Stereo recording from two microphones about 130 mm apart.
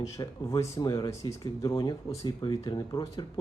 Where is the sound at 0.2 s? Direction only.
30° left (ahead or behind).